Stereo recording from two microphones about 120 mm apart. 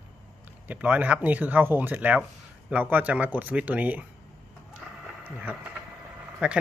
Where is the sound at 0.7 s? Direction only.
15° right (ahead or behind).